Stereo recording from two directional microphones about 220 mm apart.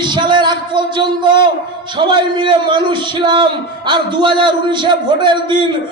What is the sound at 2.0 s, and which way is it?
A man's voice, 20° right (ahead or behind).